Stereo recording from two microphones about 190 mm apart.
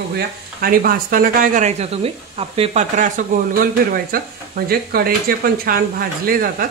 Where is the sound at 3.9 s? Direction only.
50° right (ahead or behind).